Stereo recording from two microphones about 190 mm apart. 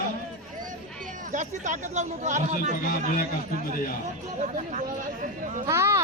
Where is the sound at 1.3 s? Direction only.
40° right (ahead or behind).